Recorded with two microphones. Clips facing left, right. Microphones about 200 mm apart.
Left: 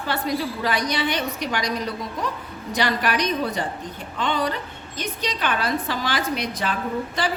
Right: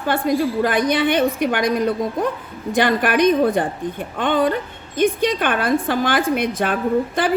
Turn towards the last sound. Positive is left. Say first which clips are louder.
# right 7 dB
turn(degrees=-55)  # may be behind; listen again after turning